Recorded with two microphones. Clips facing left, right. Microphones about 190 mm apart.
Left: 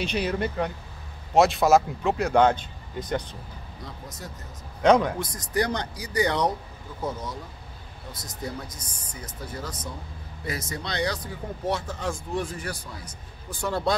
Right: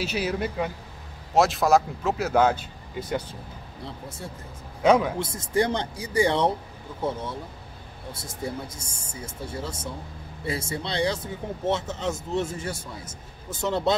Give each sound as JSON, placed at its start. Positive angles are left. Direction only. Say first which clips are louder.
{"t": 0.0, "sound": "speech", "louder": "even", "side_deg": -5}
{"t": 4.8, "sound": "a man's voice", "louder": "even", "side_deg": -5}
{"t": 5.2, "sound": "speech", "louder": "right 2 dB", "side_deg": -25}